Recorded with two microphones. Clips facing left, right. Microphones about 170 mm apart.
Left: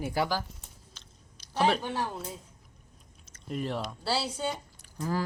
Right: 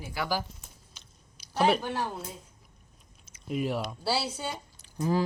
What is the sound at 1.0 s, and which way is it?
Chewing, 10° right (ahead or behind).